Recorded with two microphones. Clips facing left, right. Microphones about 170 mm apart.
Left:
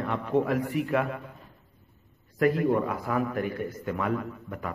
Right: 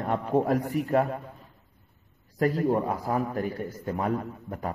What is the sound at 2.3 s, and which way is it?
A man's voice, 35° right (ahead or behind).